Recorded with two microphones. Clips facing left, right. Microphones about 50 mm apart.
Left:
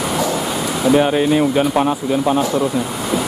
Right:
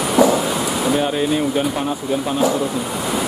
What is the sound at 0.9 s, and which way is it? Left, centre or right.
Speech, left.